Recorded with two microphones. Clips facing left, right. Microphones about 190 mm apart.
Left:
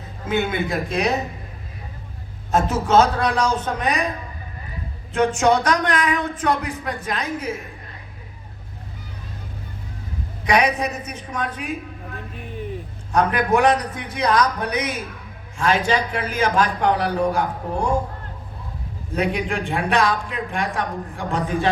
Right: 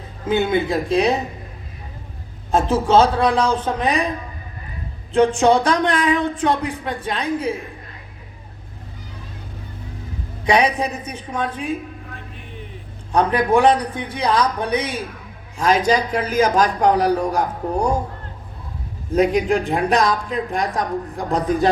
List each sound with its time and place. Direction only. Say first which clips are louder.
0.3 s speech: right 4 dB; 30° right (ahead or behind)
2.5 s speech: right 2 dB; 30° right (ahead or behind)
5.1 s speech: right 3 dB; 30° right (ahead or behind)
10.4 s speech: right 2 dB; 30° right (ahead or behind)
13.1 s speech: right 2 dB; 30° right (ahead or behind)
19.1 s speech: right 6 dB; 40° right (ahead or behind)